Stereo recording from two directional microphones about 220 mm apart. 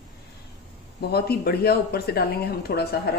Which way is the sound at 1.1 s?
45° left (ahead or behind).